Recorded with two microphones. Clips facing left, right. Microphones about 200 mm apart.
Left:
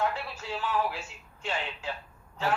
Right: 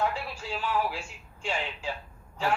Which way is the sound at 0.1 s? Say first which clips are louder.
Right 1 dB; 10° right (ahead or behind).